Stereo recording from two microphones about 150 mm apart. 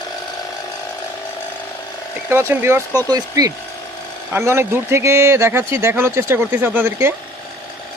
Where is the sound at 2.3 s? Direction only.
15° right (ahead or behind).